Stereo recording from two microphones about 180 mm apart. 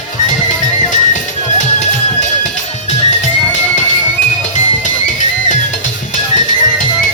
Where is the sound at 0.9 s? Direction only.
45° left (ahead or behind).